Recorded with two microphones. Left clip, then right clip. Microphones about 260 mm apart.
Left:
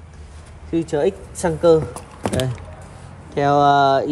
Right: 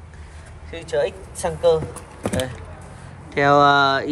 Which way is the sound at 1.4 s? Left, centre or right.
Left.